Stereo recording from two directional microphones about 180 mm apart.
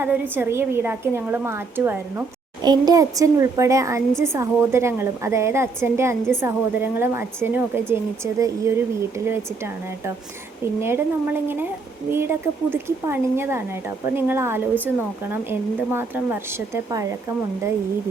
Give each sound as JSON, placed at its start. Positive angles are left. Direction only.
{"t": 0.0, "sound": "a woman's voice", "side_deg": -10}
{"t": 2.6, "sound": "a woman's voice", "side_deg": -20}